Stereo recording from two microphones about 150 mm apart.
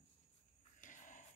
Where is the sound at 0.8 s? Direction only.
60° left (ahead or behind).